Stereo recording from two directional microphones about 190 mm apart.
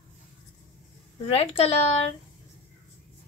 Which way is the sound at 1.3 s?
30° left (ahead or behind).